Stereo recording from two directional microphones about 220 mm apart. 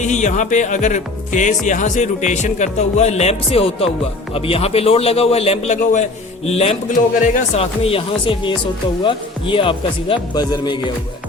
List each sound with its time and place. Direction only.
0.0 s a man's voice: 30° left (ahead or behind)